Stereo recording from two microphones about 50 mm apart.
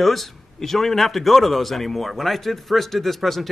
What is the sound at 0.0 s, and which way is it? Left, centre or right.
A man's voice, centre.